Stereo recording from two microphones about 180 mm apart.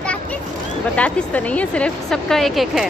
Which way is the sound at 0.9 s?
5° left (ahead or behind).